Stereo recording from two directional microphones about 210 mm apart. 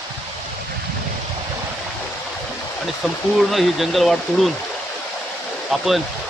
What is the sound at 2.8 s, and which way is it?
Speech, centre (ahead or behind).